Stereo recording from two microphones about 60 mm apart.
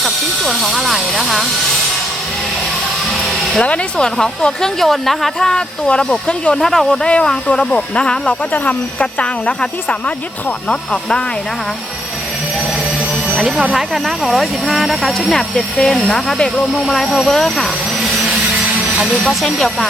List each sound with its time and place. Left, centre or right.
0.0 s speech: centre
3.1 s music: centre
3.6 s speech: centre
7.1 s speech: centre
13.6 s speech: centre
19.3 s speech: centre